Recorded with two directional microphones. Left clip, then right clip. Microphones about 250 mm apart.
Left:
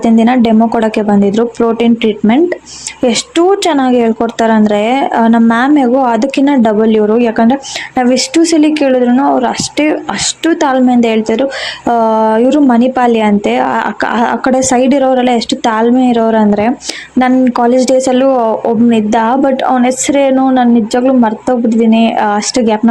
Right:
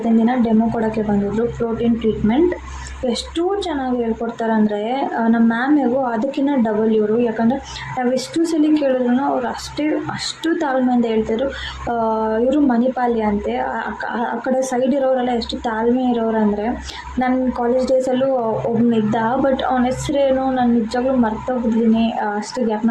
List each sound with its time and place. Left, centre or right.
0.3 s a woman's voice: left